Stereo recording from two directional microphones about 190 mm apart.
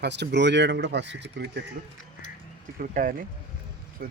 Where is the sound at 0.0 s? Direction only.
65° right (ahead or behind).